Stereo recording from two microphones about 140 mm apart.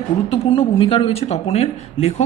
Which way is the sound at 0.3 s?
40° left (ahead or behind).